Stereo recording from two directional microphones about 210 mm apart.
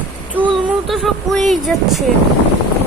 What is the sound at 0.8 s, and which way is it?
Speech, centre (ahead or behind).